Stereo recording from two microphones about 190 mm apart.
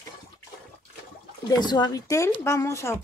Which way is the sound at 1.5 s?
20° left (ahead or behind).